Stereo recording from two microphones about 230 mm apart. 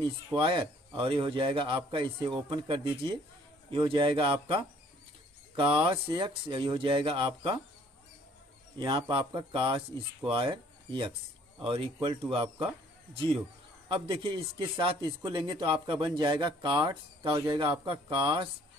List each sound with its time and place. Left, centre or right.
0.4 s speech: right
8.7 s speech: right
13.8 s speech: right